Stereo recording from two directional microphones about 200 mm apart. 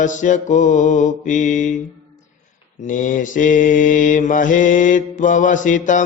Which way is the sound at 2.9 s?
40° left (ahead or behind).